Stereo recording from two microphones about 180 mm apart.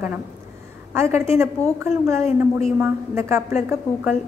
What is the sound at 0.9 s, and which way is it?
A woman's voice, 15° right (ahead or behind).